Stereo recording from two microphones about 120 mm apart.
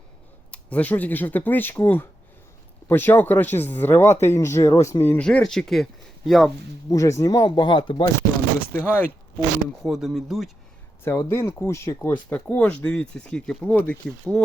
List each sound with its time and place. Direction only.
0.5 s speech: 10° left (ahead or behind)
5.2 s speech: 5° left (ahead or behind)
6.9 s speech: 25° left (ahead or behind)
8.7 s speech: 15° left (ahead or behind)
9.8 s speech: centre (ahead or behind)
11.0 s speech: 20° left (ahead or behind)
12.3 s speech: 10° left (ahead or behind)